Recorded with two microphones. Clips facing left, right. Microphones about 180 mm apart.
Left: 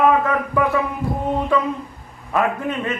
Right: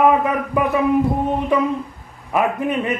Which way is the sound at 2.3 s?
15° right (ahead or behind).